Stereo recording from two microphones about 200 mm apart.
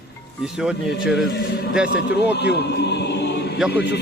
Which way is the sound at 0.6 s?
Centre (ahead or behind).